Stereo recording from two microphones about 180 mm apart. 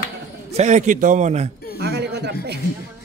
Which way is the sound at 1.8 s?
65° right (ahead or behind).